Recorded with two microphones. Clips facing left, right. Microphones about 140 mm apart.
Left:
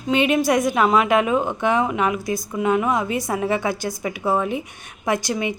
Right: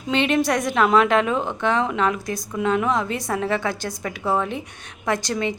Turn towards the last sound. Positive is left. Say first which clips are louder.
# left 1 dB
turn(degrees=10)  # may be behind; listen again after turning